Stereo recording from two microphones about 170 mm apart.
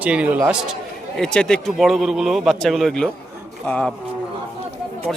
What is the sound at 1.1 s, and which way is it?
A man's voice, 5° left (ahead or behind).